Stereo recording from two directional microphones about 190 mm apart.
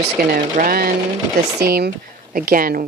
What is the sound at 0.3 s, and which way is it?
Speech, 45° right (ahead or behind).